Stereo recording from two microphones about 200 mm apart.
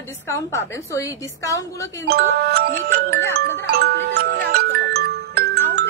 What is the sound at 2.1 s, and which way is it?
Speech, 50° right (ahead or behind).